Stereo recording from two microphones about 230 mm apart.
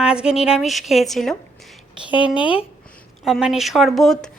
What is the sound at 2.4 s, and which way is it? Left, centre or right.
Speech, left.